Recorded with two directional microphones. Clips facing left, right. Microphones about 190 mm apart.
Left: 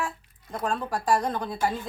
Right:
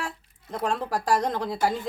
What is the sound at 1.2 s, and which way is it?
Speech, 90° right.